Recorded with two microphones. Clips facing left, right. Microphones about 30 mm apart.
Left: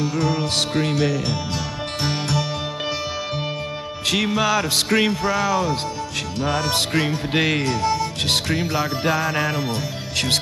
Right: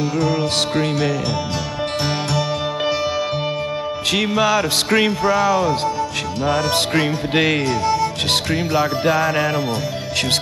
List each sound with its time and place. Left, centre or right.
0.3 s music: right
4.1 s music: right
5.2 s speech: centre
6.4 s music: centre
7.6 s speech: centre
8.3 s music: right
9.0 s speech: centre